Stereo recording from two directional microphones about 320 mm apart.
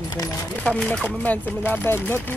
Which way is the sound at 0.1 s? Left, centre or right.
Centre.